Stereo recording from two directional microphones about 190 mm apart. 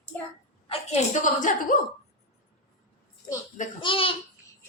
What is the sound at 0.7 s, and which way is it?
A woman's voice, 40° left (ahead or behind).